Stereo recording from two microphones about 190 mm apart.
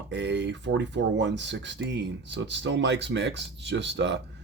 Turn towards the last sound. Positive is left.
turn(degrees=-65)  # may be behind; listen again after turning